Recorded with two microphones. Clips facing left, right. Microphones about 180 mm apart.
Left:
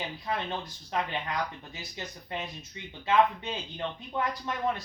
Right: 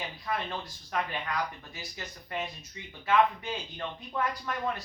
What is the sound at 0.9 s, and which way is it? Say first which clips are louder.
Speech: left 1 dB; 25° left (ahead or behind).